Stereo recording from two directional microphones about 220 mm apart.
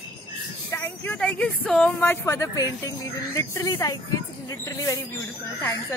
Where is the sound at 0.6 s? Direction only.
10° left (ahead or behind).